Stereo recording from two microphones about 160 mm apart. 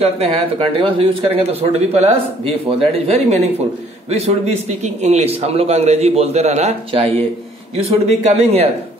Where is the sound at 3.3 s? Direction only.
40° right (ahead or behind).